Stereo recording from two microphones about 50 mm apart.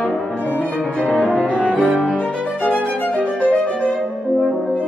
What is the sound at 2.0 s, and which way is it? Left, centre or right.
Violin, left.